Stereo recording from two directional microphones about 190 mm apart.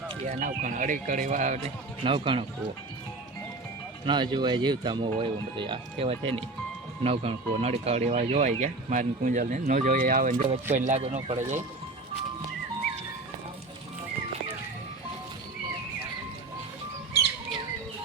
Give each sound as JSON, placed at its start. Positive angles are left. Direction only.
{"t": 0.3, "sound": "speech", "side_deg": -45}
{"t": 2.0, "sound": "speech", "side_deg": -25}
{"t": 4.0, "sound": "speech", "side_deg": -25}